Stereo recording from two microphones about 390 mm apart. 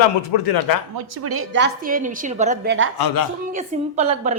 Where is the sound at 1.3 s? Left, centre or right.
Right.